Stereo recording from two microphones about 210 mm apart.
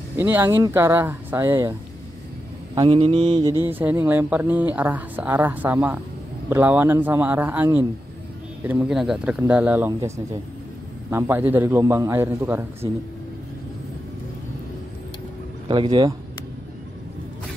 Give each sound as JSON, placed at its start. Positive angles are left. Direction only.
{"t": 0.1, "sound": "speech", "side_deg": -10}
{"t": 3.4, "sound": "speech", "side_deg": -10}
{"t": 15.7, "sound": "speech", "side_deg": -20}